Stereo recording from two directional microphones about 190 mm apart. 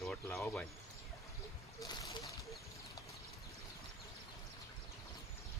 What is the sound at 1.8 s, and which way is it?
Speech, 20° left (ahead or behind).